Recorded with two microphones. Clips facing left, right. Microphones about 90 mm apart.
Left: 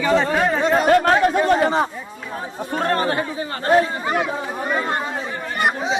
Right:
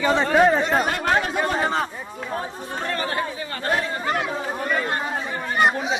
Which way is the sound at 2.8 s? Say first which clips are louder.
Left 7 dB; 45° left (ahead or behind).